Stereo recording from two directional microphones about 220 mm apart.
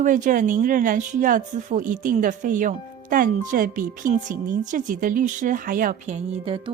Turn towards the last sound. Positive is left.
turn(degrees=-25)  # may be behind; listen again after turning